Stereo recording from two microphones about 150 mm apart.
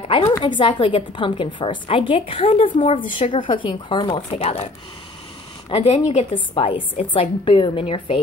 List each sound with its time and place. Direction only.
0.3 s a woman's voice: 30° left (ahead or behind)
5.7 s speech: 40° left (ahead or behind)
6.3 s a woman's voice: 35° left (ahead or behind)